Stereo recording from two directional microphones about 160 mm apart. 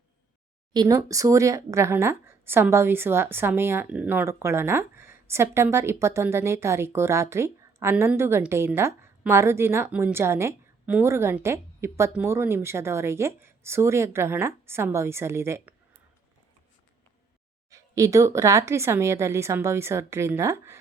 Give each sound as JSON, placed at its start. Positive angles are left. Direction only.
{"t": 0.7, "sound": "speech", "side_deg": -25}
{"t": 17.7, "sound": "speech", "side_deg": -20}